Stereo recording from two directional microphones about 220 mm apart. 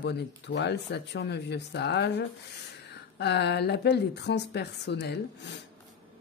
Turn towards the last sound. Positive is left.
turn(degrees=50)  # may be behind; listen again after turning